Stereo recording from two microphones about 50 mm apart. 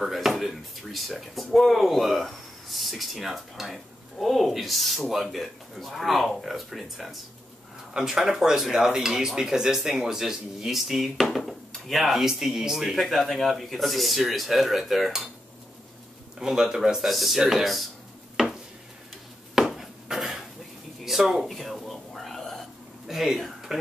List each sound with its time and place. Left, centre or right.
0.0 s speech: centre
12.9 s speech: centre
16.3 s speech: centre
19.5 s a sound: centre
21.0 s whispering: centre
23.0 s speech: centre